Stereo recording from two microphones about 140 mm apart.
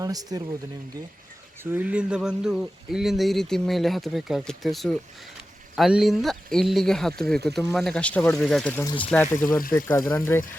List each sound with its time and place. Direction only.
0.0 s speech: 25° right (ahead or behind)
1.7 s speech: 10° right (ahead or behind); by 10.4 s 15° left (ahead or behind)